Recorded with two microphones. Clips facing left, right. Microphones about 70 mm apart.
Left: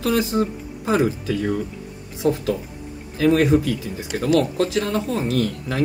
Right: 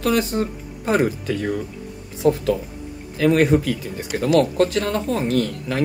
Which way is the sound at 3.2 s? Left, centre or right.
Right.